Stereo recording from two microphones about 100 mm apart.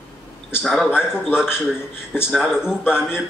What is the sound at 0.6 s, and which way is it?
Speech, 5° left (ahead or behind).